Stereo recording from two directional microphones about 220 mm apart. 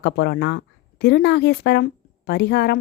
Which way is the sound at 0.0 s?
45° left (ahead or behind).